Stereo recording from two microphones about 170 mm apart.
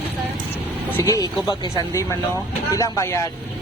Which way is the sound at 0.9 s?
20° left (ahead or behind).